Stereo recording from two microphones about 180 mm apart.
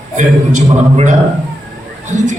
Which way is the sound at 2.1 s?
40° right (ahead or behind).